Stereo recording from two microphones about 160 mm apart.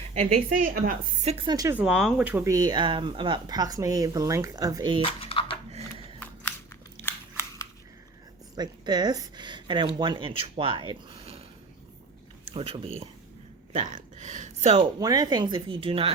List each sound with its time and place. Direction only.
0.6 s speech: 65° right (ahead or behind)
1.2 s speech: 45° right (ahead or behind)
1.5 s speech: 20° right (ahead or behind)
1.7 s speech: 5° right (ahead or behind); by 5.0 s 25° right (ahead or behind)
5.2 s a sound: 35° left (ahead or behind)
5.7 s a sound: 35° right (ahead or behind)
6.1 s crunch: 15° left (ahead or behind)
8.5 s speech: 25° right (ahead or behind)
12.5 s speech: 35° right (ahead or behind)
13.7 s speech: 50° right (ahead or behind)
14.8 s speech: 25° right (ahead or behind)